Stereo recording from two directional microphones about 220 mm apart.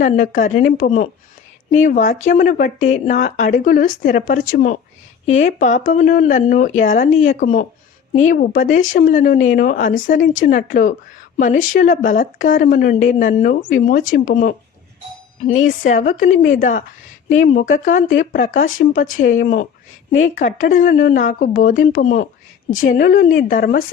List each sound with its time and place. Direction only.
0.0 s speech: 35° left (ahead or behind)
15.9 s speech: 35° left (ahead or behind)